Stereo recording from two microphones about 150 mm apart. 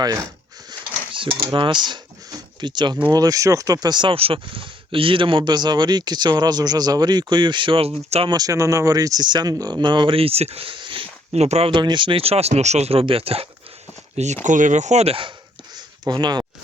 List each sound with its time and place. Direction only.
0.7 s a sound: 35° right (ahead or behind)
2.6 s speech: 30° right (ahead or behind)
8.3 s speech: 25° right (ahead or behind)
11.3 s speech: 45° right (ahead or behind)
14.4 s speech: 55° right (ahead or behind); by 15.3 s 40° right (ahead or behind)
15.7 s a sound: 30° right (ahead or behind)